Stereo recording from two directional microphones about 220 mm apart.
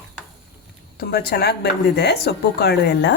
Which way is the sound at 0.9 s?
45° left (ahead or behind).